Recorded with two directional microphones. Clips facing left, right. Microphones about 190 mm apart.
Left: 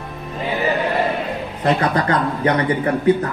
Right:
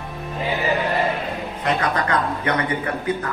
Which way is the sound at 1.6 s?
35° left (ahead or behind).